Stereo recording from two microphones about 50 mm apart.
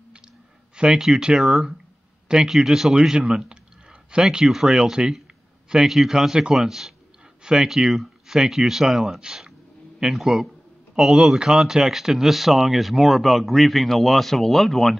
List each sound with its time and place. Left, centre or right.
0.7 s speech: centre